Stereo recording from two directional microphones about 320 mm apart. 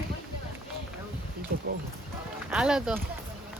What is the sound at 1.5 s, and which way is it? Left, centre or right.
Horse, right.